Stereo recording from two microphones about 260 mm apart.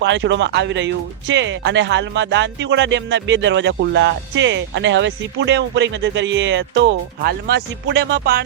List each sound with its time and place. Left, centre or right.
0.0 s speech: right